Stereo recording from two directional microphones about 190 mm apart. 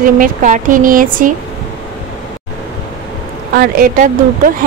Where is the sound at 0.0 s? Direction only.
45° right (ahead or behind).